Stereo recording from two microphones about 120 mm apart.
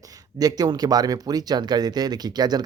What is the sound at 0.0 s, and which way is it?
Speech, 30° right (ahead or behind).